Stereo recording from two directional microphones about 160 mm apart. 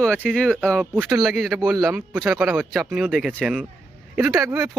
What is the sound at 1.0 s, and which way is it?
Speech, 20° right (ahead or behind).